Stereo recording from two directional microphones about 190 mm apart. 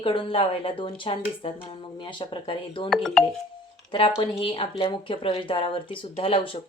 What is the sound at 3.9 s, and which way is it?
Speech, 25° left (ahead or behind).